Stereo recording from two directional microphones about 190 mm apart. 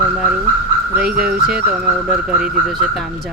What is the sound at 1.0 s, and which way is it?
Speech, 50° right (ahead or behind).